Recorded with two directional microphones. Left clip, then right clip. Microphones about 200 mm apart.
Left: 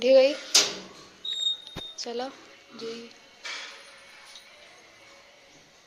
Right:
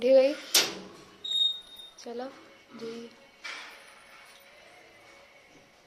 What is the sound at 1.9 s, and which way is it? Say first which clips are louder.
Speech: left 5 dB; centre (ahead or behind).